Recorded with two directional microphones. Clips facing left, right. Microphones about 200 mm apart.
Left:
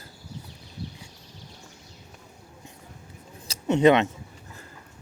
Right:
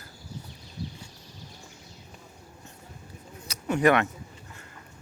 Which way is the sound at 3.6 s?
20° left (ahead or behind).